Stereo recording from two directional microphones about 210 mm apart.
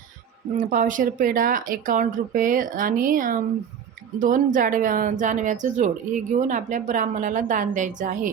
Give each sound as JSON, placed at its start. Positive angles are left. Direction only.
{"t": 0.5, "sound": "speech", "side_deg": -40}